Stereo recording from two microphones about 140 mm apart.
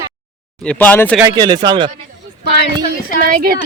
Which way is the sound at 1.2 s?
30° right (ahead or behind).